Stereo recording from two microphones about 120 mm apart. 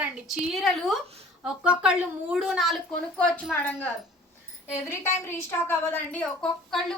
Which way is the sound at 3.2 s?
10° left (ahead or behind).